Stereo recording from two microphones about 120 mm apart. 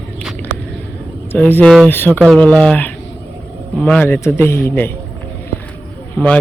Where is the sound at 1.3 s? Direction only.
15° left (ahead or behind).